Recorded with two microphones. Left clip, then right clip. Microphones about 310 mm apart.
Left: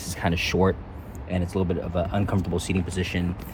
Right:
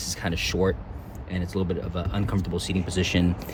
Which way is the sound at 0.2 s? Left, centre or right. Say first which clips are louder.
Left 3 dB; centre.